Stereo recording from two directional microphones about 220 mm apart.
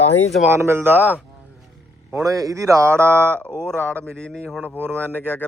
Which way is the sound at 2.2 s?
15° right (ahead or behind).